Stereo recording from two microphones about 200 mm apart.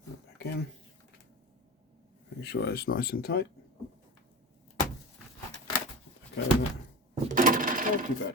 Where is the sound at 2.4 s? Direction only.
55° left (ahead or behind).